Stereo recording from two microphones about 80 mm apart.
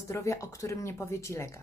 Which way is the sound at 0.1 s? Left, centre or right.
Left.